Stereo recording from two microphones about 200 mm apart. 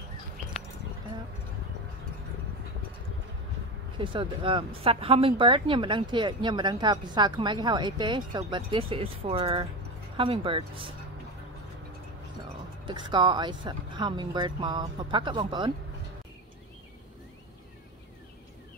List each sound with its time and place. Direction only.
4.0 s speech: 25° right (ahead or behind)
12.8 s speech: 25° right (ahead or behind)